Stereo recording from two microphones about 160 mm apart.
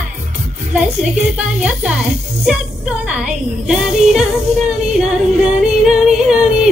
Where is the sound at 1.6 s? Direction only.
5° right (ahead or behind).